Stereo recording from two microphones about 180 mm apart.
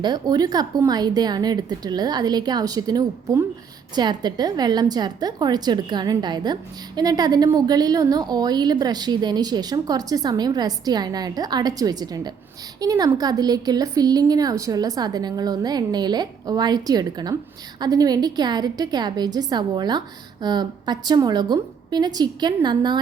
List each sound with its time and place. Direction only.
0.0 s a woman's voice: 20° right (ahead or behind)